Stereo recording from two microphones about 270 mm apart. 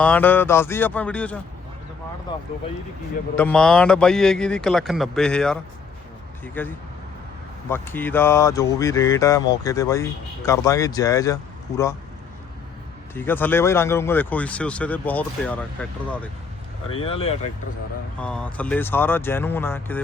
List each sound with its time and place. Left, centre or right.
0.0 s speech: centre
3.3 s speech: centre
7.7 s speech: centre
13.1 s speech: centre
16.9 s speech: left
18.2 s speech: centre